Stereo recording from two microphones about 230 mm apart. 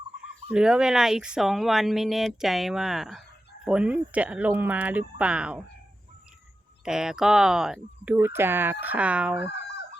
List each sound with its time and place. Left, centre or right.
0.5 s speech: centre
6.8 s speech: centre
9.4 s fowl: left